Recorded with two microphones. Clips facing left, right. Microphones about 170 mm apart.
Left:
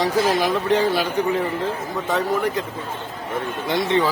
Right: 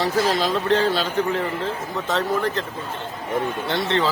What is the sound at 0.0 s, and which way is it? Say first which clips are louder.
A man's voice: left 2 dB; 15° left (ahead or behind).